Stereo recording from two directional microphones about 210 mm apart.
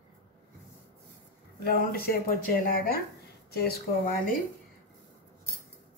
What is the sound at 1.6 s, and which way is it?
Speech, 45° left (ahead or behind).